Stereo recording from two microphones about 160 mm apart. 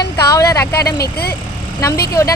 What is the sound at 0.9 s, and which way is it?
Speech, 75° left (ahead or behind).